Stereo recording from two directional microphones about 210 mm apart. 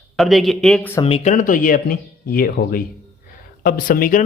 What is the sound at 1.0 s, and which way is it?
Speech, 30° left (ahead or behind).